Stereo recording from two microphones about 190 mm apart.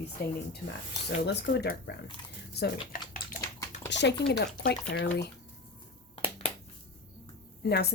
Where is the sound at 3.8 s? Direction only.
65° left (ahead or behind).